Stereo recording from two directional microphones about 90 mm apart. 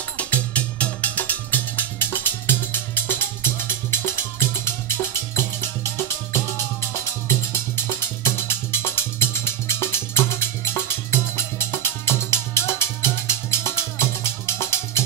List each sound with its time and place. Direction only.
0.2 s music: 15° left (ahead or behind); by 15.0 s 30° left (ahead or behind)